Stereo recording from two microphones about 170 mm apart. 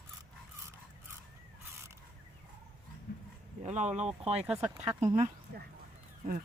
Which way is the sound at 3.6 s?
40° right (ahead or behind).